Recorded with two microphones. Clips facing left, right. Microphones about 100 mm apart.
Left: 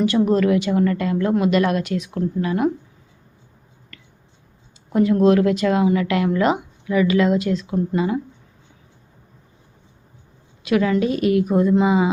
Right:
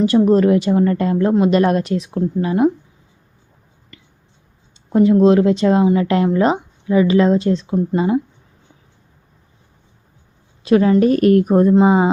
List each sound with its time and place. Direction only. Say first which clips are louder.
0.0 s a woman's voice: right 4 dB; 35° right (ahead or behind)
3.9 s a sound: right 2 dB; 20° right (ahead or behind)
4.9 s a woman's voice: right 4 dB; 25° right (ahead or behind)
10.6 s a woman's voice: right 6 dB; 35° right (ahead or behind)
11.1 s a woman's voice: right 5 dB; 50° right (ahead or behind)